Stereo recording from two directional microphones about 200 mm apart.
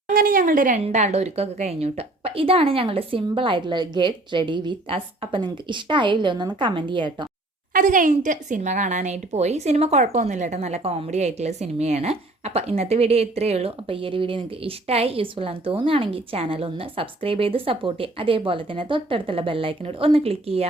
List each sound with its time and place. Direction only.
0.1 s a woman's voice: 45° right (ahead or behind); by 7.3 s 25° right (ahead or behind)
7.7 s a woman's voice: 40° right (ahead or behind)